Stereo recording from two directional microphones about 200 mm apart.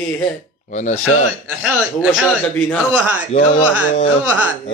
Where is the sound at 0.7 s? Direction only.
35° left (ahead or behind).